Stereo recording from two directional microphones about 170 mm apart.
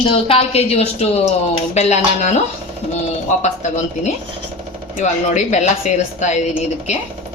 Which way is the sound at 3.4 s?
45° left (ahead or behind).